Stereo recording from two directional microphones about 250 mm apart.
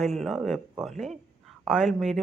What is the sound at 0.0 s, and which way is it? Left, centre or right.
Speech, centre.